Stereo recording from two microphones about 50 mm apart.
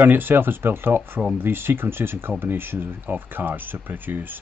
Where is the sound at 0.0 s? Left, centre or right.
Right.